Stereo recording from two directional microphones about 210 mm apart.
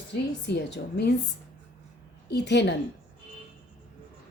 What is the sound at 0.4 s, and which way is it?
Speech, 50° left (ahead or behind).